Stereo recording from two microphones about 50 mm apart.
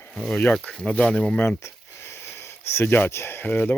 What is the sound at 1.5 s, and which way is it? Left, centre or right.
Speech, left.